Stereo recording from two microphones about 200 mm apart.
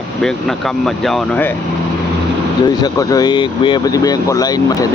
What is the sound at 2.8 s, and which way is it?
Speech, 20° left (ahead or behind).